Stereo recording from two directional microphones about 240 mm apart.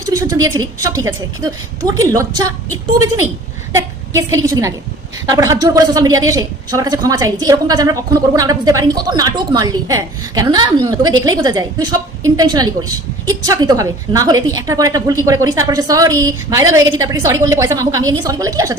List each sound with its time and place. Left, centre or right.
0.0 s a woman's voice: centre
3.8 s a woman's voice: centre